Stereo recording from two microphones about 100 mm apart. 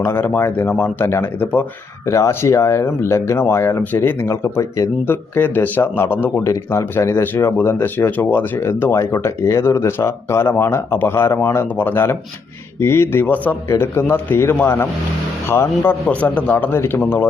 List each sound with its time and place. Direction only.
0.0 s speech: 25° left (ahead or behind)
5.0 s speech: 20° left (ahead or behind)